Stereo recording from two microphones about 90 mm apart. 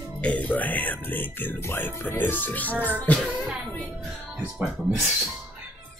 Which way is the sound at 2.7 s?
20° right (ahead or behind).